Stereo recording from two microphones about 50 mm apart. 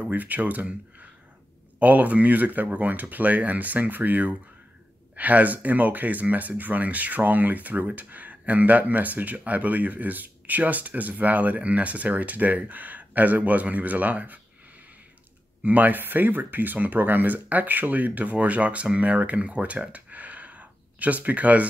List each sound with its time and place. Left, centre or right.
0.0 s speech: right
1.8 s speech: right
15.6 s speech: right